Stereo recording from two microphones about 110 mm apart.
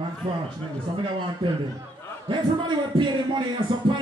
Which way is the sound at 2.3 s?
45° right (ahead or behind).